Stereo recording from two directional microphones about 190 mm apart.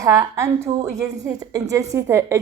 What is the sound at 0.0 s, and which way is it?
A woman's voice, 15° right (ahead or behind).